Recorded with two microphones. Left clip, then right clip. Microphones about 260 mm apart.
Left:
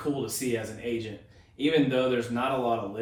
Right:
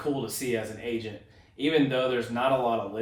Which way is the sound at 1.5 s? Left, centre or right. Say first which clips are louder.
Even; right.